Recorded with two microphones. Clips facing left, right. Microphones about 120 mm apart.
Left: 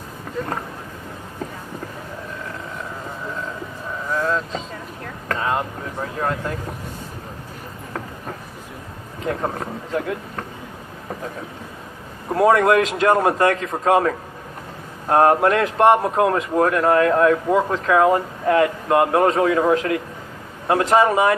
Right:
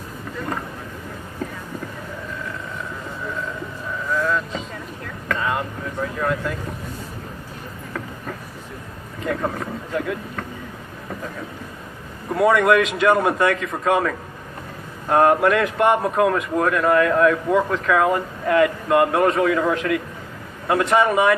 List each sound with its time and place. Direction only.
4.1 s vehicle: 35° left (ahead or behind)
5.3 s speech: 35° left (ahead or behind)
9.2 s speech: 30° left (ahead or behind)
12.3 s speech: 30° left (ahead or behind)